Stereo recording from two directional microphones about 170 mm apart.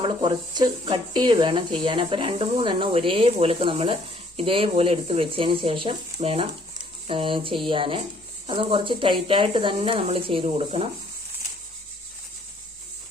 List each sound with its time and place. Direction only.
0.0 s speech: 30° right (ahead or behind)